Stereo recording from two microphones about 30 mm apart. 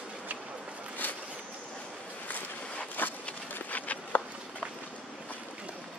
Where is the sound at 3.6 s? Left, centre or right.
Left.